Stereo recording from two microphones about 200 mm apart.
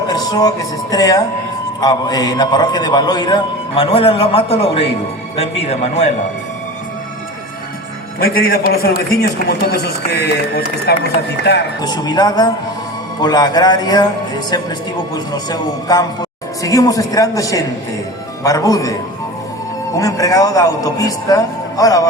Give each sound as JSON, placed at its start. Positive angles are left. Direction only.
{"t": 0.1, "sound": "a man's voice", "side_deg": 20}
{"t": 8.2, "sound": "a man's voice", "side_deg": 50}
{"t": 11.8, "sound": "a man's voice", "side_deg": 20}
{"t": 20.0, "sound": "a man's voice", "side_deg": 15}